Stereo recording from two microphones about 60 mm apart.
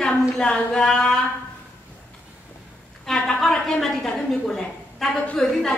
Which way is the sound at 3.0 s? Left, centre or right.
Centre.